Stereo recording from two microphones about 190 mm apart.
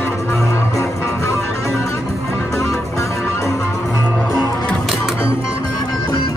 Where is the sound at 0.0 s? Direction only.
15° left (ahead or behind).